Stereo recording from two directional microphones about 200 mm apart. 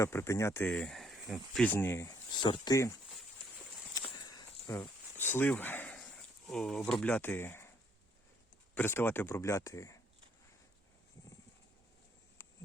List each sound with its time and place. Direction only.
0.0 s speech: 15° left (ahead or behind)
3.9 s walk: 20° left (ahead or behind)
4.8 s a sound: 10° left (ahead or behind)
6.5 s speech: 5° left (ahead or behind)
8.7 s speech: 10° left (ahead or behind)
12.4 s insect: 15° left (ahead or behind)